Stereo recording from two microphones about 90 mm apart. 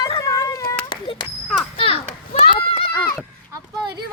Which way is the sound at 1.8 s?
90° left.